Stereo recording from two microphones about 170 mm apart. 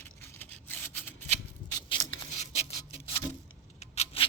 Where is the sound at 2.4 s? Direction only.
40° left (ahead or behind).